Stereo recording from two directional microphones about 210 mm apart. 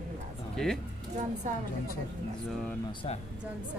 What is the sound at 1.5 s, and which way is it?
Speech, 35° right (ahead or behind).